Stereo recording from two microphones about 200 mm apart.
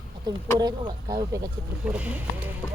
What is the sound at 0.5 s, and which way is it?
Speech, 20° right (ahead or behind).